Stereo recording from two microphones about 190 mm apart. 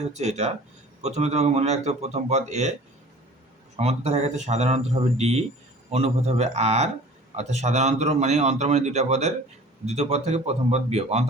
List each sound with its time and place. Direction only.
0.1 s a man's voice: 35° right (ahead or behind)
3.8 s a man's voice: 35° right (ahead or behind)